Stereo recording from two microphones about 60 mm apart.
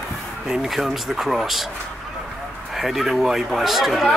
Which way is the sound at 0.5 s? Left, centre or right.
Centre.